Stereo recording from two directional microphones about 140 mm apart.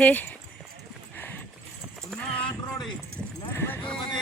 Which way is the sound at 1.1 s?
15° left (ahead or behind).